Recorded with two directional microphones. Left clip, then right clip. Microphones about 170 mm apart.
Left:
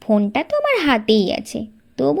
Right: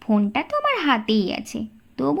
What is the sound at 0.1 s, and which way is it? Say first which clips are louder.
Speech: left 4 dB; 10° left (ahead or behind).